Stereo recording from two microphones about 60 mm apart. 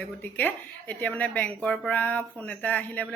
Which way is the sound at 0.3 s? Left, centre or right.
Left.